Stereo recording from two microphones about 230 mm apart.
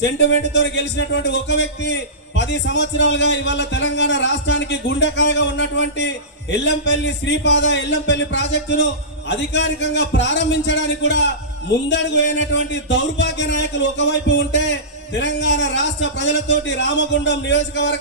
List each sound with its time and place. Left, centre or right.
0.0 s speech: left